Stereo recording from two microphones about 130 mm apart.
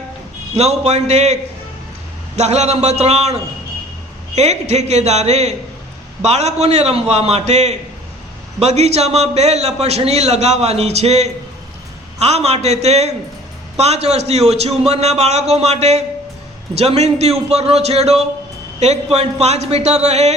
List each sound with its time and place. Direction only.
0.5 s a man's voice: 55° right (ahead or behind)
4.4 s a man's voice: 60° right (ahead or behind)